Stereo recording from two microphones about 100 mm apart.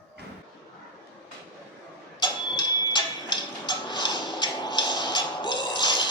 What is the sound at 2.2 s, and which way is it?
Music, 45° left (ahead or behind).